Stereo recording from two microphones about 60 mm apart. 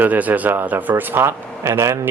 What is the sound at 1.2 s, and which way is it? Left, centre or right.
Speech, right.